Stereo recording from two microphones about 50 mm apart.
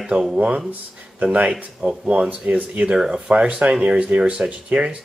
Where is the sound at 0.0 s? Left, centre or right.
Centre.